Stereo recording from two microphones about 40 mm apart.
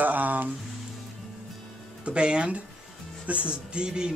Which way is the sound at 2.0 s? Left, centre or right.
Right.